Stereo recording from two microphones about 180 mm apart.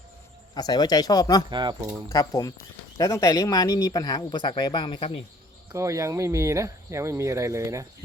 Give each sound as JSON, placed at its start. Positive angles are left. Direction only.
{"t": 0.5, "sound": "speech", "side_deg": 25}
{"t": 1.5, "sound": "speech", "side_deg": -25}
{"t": 2.0, "sound": "speech", "side_deg": 20}
{"t": 5.7, "sound": "speech", "side_deg": -15}